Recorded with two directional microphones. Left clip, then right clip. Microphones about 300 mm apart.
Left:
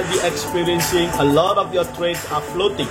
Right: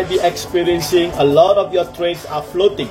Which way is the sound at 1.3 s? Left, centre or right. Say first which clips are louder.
Right 7 dB; centre.